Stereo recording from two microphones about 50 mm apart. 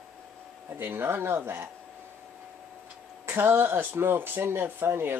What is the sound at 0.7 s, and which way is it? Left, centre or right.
Speech, right.